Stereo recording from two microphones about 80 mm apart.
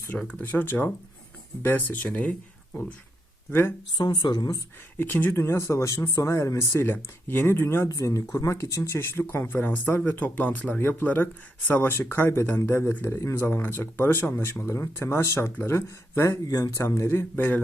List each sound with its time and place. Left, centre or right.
0.2 s speech: centre
3.5 s speech: left
3.9 s speech: left
4.9 s speech: left
7.9 s speech: left
13.5 s speech: left
16.5 s speech: left
16.7 s speech: left